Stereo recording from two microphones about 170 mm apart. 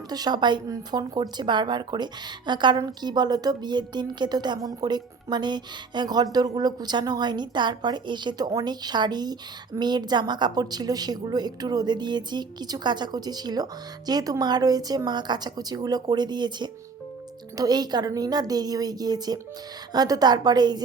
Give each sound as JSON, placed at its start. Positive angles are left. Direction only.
{"t": 0.1, "sound": "a woman's voice", "side_deg": -25}